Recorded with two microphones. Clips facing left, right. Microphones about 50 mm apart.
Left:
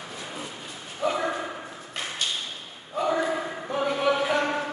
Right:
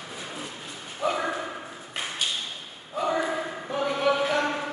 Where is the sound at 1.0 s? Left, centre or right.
Centre.